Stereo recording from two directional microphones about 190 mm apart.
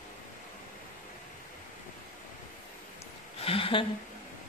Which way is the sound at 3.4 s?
30° left (ahead or behind).